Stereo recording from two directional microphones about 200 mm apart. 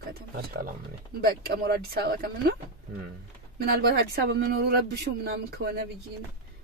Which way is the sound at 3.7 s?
50° right (ahead or behind).